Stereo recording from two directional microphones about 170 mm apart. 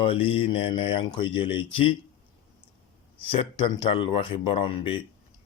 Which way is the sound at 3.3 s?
30° left (ahead or behind).